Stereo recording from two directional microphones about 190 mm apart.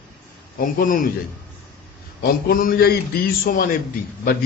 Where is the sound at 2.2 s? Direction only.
50° left (ahead or behind).